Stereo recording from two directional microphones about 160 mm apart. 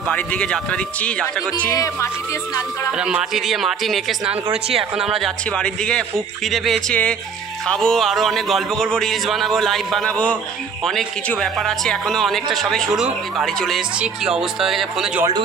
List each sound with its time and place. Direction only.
0.1 s a man's voice: 5° left (ahead or behind)
1.6 s speech: 20° left (ahead or behind)
2.9 s speech: 5° right (ahead or behind)